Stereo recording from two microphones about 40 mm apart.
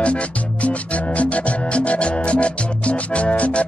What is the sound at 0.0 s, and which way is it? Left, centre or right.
Music, left.